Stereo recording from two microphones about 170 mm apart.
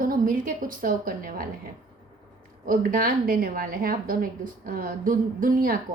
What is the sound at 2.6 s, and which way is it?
A woman's voice, 55° right (ahead or behind).